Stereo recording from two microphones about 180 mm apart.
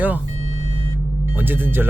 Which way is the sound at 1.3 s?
10° right (ahead or behind).